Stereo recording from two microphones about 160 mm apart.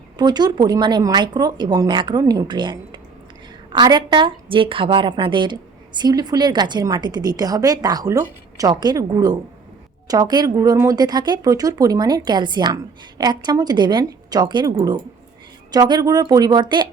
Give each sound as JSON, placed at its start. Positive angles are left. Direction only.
{"t": 0.2, "sound": "a woman's voice", "side_deg": -25}
{"t": 15.7, "sound": "a woman's voice", "side_deg": -25}